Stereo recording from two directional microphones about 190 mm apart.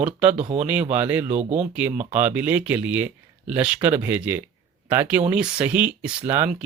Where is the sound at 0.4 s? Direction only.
35° right (ahead or behind).